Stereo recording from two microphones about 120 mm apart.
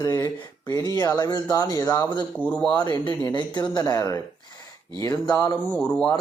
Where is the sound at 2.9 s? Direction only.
40° left (ahead or behind).